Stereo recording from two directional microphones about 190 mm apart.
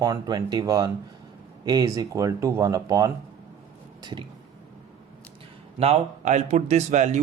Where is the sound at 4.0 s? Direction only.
25° right (ahead or behind).